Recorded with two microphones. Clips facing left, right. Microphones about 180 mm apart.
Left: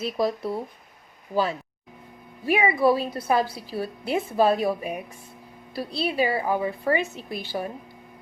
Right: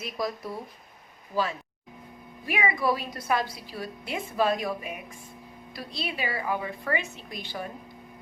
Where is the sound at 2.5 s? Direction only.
30° left (ahead or behind).